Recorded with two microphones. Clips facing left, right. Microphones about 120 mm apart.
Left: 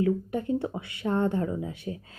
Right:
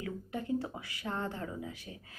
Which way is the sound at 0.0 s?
25° left (ahead or behind).